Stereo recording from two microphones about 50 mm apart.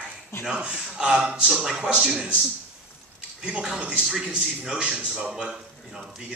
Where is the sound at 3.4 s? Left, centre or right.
Centre.